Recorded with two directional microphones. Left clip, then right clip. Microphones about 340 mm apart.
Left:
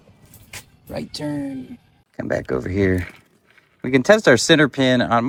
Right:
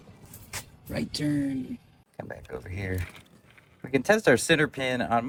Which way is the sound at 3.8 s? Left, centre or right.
Centre.